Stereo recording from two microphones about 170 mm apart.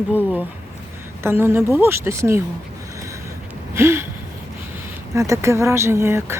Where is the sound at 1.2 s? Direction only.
10° right (ahead or behind).